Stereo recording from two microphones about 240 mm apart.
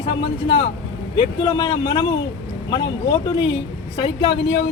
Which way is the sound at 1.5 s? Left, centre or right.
Centre.